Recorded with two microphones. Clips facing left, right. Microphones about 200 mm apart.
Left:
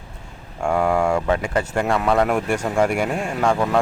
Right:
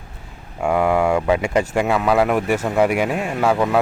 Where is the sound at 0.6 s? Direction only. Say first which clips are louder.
Right 2 dB; 5° right (ahead or behind).